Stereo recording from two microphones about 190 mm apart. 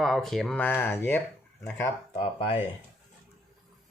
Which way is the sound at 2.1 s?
30° left (ahead or behind).